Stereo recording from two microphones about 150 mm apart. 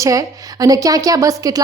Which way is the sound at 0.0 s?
20° right (ahead or behind).